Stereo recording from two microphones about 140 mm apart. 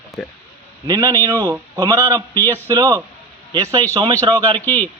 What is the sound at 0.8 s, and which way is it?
A man's voice, 25° right (ahead or behind).